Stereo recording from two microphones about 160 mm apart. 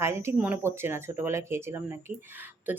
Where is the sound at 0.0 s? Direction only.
15° right (ahead or behind).